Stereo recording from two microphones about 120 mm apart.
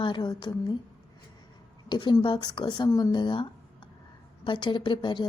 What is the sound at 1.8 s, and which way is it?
A woman's voice, 40° left (ahead or behind).